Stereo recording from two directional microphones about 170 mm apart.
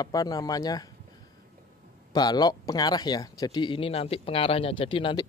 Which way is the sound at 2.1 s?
25° left (ahead or behind).